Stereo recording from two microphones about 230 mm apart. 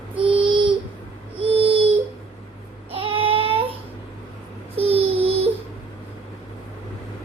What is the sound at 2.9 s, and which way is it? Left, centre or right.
Baby cry, right.